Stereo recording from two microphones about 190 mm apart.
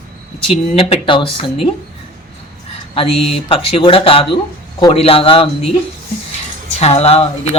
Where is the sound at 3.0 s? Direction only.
30° left (ahead or behind).